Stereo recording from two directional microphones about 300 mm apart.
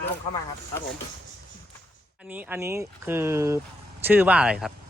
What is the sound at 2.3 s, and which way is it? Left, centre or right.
Speech, centre.